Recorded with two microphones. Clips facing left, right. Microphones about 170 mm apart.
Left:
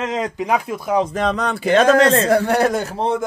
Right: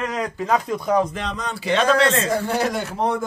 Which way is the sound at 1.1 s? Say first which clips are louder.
Left 8 dB; 60° left (ahead or behind).